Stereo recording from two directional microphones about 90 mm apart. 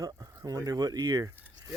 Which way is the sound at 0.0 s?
45° right (ahead or behind).